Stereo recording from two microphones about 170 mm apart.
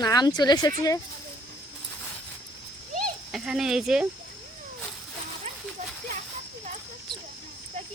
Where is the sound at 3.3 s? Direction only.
5° right (ahead or behind).